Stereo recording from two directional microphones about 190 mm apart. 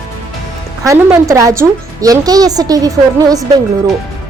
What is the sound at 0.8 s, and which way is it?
A woman's voice, 15° right (ahead or behind).